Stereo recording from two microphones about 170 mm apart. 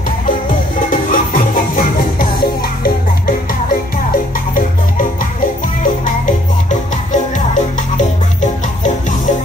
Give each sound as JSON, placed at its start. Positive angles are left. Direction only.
{"t": 0.5, "sound": "music", "side_deg": 55}
{"t": 6.2, "sound": "music", "side_deg": 50}